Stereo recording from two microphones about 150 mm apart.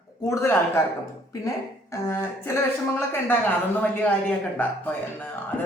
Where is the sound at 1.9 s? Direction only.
20° left (ahead or behind).